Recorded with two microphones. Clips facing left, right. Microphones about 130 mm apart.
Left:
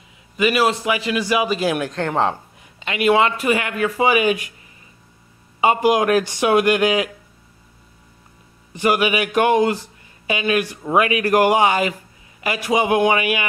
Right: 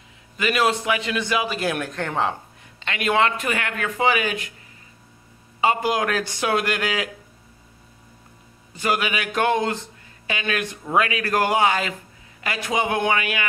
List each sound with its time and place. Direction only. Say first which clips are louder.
0.4 s speech: left 4 dB; 5° left (ahead or behind)
5.6 s speech: left 5 dB; 15° left (ahead or behind)
8.7 s speech: left 6 dB; 15° left (ahead or behind)